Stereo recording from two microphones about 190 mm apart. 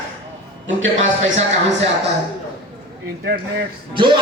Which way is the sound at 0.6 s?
80° right.